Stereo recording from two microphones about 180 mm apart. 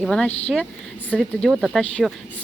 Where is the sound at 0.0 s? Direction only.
5° left (ahead or behind).